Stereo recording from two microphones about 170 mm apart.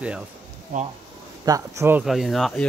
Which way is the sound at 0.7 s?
50° right (ahead or behind).